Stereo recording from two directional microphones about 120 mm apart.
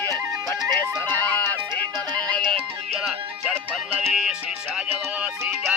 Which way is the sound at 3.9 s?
10° right (ahead or behind).